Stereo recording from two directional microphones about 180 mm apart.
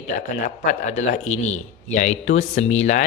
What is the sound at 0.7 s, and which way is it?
Speech, 45° left (ahead or behind).